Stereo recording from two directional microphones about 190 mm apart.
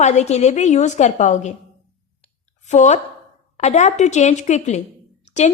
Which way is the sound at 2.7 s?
35° left (ahead or behind).